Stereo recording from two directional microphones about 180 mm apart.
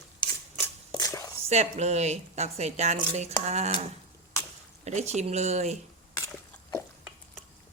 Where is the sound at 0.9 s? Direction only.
20° left (ahead or behind).